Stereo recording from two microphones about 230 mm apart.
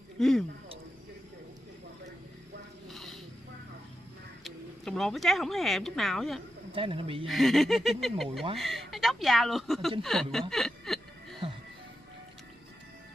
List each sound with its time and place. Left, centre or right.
0.2 s speech: centre
2.9 s snake: centre
4.5 s speech: centre
6.7 s speech: right
7.2 s speech: centre
10.5 s a sound: centre